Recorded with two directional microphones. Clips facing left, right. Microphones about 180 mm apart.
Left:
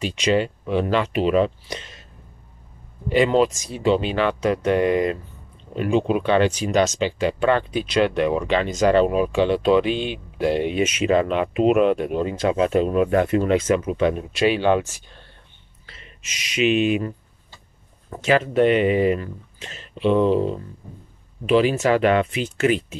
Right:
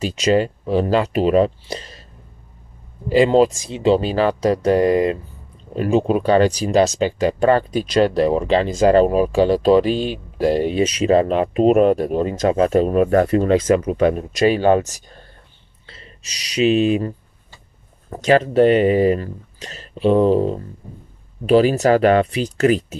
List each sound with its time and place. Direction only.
0.0 s speech: 40° right (ahead or behind)
3.1 s speech: 35° right (ahead or behind)
18.1 s speech: 40° right (ahead or behind)